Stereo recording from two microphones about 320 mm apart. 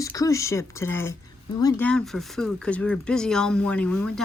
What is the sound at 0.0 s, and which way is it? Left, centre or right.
Speech, centre.